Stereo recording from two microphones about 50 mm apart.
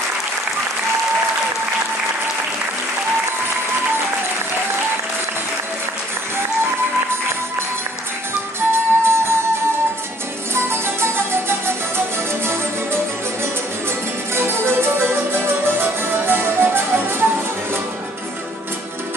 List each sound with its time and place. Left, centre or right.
8.5 s music: right
10.5 s music: right